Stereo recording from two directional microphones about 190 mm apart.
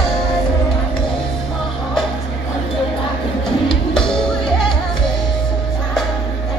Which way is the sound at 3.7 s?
5° left (ahead or behind).